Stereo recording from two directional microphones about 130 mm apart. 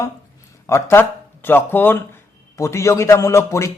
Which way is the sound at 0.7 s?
20° left (ahead or behind).